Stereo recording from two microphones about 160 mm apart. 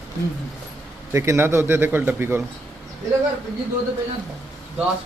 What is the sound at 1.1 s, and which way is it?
A man's voice, 15° right (ahead or behind).